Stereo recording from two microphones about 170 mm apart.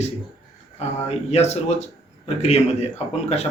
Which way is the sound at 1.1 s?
40° left (ahead or behind).